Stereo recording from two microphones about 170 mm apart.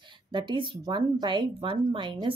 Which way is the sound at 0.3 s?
25° right (ahead or behind).